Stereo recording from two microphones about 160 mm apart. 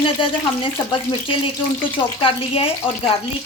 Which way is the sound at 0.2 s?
30° left (ahead or behind).